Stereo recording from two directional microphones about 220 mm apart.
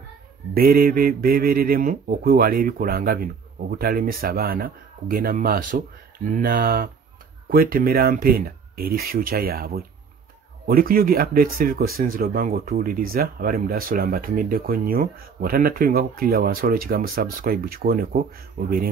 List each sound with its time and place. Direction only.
0.6 s speech: 40° right (ahead or behind)